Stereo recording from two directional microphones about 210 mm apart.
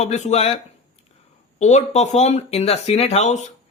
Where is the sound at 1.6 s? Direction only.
35° left (ahead or behind).